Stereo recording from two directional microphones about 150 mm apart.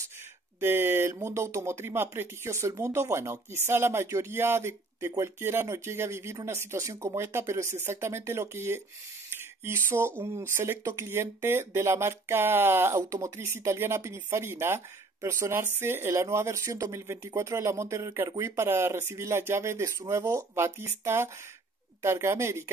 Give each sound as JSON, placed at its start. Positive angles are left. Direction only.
{"t": 0.6, "sound": "speech", "side_deg": -15}